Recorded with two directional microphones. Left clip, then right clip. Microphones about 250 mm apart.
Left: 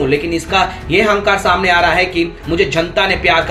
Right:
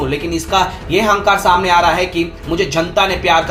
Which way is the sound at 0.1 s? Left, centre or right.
Right.